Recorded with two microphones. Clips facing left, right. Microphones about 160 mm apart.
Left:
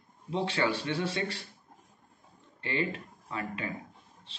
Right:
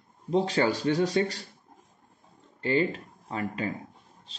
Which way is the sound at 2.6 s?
35° right (ahead or behind).